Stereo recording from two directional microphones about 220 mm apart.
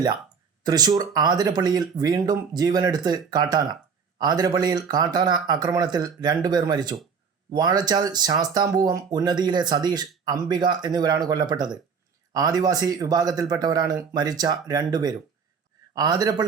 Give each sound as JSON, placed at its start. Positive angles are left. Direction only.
{"t": 0.6, "sound": "speech", "side_deg": -20}